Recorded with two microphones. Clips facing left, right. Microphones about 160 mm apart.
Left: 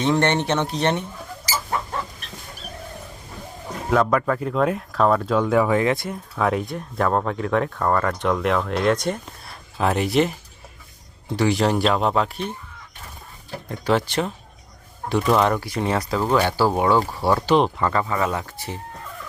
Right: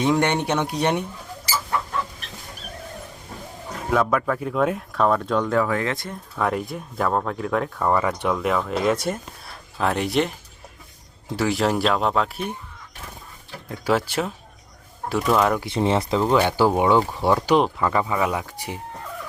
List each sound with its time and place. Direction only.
0.0 s speech: 10° right (ahead or behind)
3.8 s speech: centre (ahead or behind)
13.7 s speech: 5° right (ahead or behind)
15.6 s speech: 25° right (ahead or behind)
17.3 s speech: 5° right (ahead or behind)